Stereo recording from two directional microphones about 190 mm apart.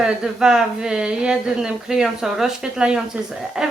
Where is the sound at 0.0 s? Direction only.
5° right (ahead or behind).